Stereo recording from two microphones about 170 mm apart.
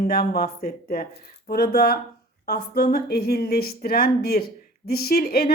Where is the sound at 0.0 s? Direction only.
65° left (ahead or behind).